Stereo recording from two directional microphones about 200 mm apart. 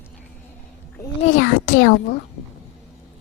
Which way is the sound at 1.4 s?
70° left (ahead or behind).